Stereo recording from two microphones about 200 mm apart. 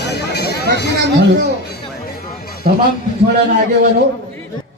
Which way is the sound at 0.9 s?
60° right (ahead or behind).